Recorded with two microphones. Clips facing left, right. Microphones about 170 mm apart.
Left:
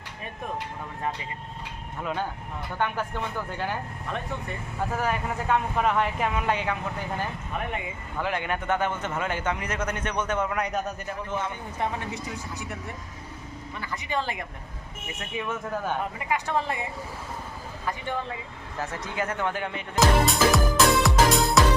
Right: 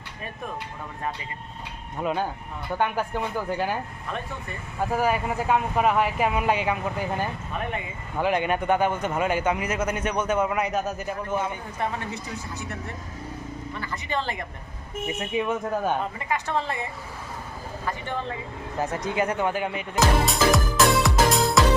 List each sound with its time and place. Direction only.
2.0 s a man's voice: 20° right (ahead or behind)
8.2 s a man's voice: 15° right (ahead or behind)
11.8 s speech: 15° left (ahead or behind)
13.8 s speech: 10° left (ahead or behind)
15.4 s a man's voice: 20° right (ahead or behind)
16.3 s speech: 10° left (ahead or behind)
18.8 s a man's voice: 20° right (ahead or behind)
20.0 s music: centre (ahead or behind)